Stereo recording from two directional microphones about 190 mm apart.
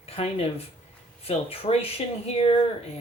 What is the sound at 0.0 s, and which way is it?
Speech, 30° left (ahead or behind).